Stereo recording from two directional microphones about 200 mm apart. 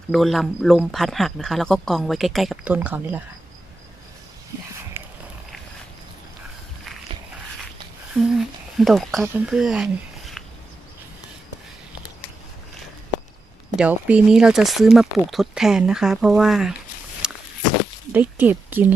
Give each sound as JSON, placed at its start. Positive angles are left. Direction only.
{"t": 0.1, "sound": "speech", "side_deg": 0}
{"t": 5.0, "sound": "a sound", "side_deg": -10}
{"t": 8.2, "sound": "speech", "side_deg": 0}
{"t": 13.7, "sound": "speech", "side_deg": -5}
{"t": 17.2, "sound": "a sound", "side_deg": -5}
{"t": 18.1, "sound": "speech", "side_deg": -10}